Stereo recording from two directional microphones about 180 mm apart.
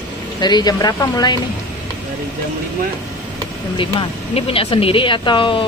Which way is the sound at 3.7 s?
30° left (ahead or behind).